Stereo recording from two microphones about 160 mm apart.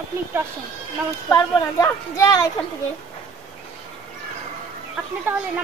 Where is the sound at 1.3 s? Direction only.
20° left (ahead or behind).